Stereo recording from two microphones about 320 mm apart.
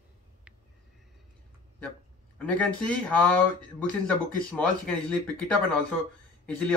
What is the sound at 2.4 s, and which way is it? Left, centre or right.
Speech, centre.